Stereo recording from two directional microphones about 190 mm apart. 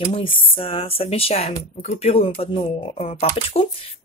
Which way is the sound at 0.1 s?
30° left (ahead or behind).